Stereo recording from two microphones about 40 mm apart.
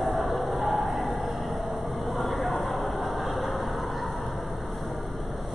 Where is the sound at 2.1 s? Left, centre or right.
Centre.